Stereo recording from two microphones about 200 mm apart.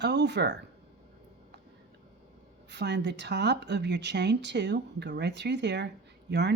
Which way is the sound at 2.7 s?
60° right (ahead or behind).